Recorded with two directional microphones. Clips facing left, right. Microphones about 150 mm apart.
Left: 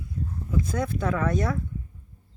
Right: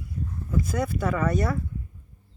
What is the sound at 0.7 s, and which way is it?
Speech, 5° right (ahead or behind).